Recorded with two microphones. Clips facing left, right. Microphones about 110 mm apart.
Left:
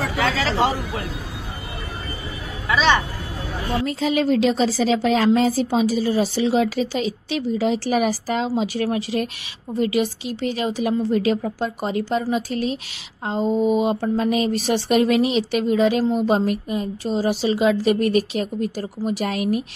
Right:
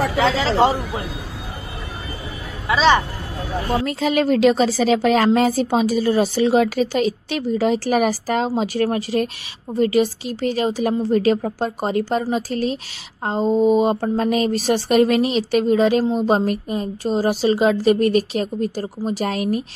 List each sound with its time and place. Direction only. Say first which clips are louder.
0.1 s speech: right 4 dB; 25° right (ahead or behind)
2.7 s speech: right 3 dB; 30° right (ahead or behind)
3.8 s a woman's voice: left 1 dB; 65° right (ahead or behind); by 19.6 s 35° right (ahead or behind)